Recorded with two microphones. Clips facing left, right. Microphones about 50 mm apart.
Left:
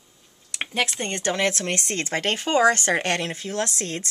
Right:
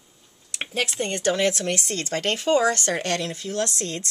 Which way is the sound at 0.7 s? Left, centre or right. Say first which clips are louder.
Even; left.